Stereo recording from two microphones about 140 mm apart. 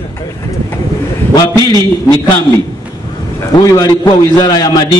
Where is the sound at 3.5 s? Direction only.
30° left (ahead or behind).